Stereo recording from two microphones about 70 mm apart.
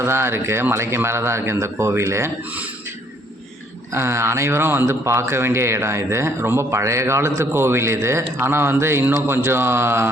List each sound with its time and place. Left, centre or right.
0.0 s a man's voice: right
3.9 s a man's voice: right